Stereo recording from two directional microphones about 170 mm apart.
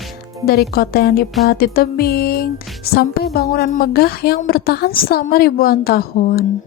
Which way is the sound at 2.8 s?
65° left (ahead or behind).